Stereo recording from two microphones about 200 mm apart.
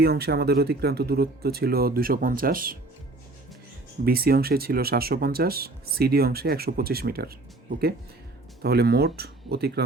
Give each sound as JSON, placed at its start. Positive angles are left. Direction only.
{"t": 0.0, "sound": "speech", "side_deg": -55}
{"t": 4.0, "sound": "speech", "side_deg": -50}
{"t": 8.6, "sound": "speech", "side_deg": -55}